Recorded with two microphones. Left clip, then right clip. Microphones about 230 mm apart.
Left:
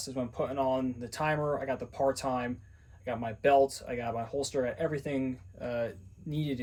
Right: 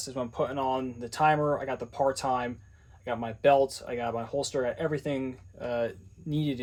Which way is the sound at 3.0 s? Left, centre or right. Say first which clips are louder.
Right 4 dB; right.